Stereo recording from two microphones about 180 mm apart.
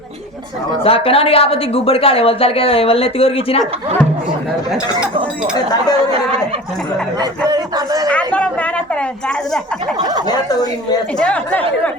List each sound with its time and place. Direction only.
0.9 s speech: 30° left (ahead or behind)
5.5 s speech: 20° left (ahead or behind)
7.2 s a man's voice: 20° right (ahead or behind)
8.1 s speech: 5° left (ahead or behind)
10.2 s speech: 20° left (ahead or behind)
11.2 s speech: 5° left (ahead or behind)